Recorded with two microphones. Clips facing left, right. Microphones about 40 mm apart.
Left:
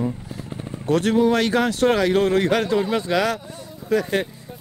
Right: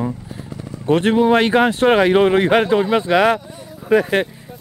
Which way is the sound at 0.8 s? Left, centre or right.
Right.